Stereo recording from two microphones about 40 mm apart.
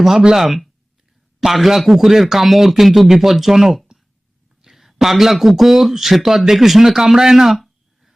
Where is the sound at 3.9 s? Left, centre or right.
Centre.